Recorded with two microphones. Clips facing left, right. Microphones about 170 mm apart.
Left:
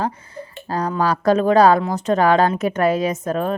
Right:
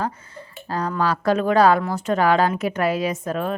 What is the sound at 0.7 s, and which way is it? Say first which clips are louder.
A woman's voice: left 2 dB; 35° left (ahead or behind).